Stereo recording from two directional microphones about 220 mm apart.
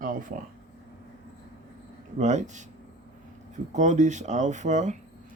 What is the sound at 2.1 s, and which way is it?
Speech, 30° right (ahead or behind).